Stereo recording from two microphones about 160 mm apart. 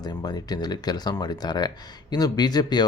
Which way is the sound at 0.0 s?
25° left (ahead or behind).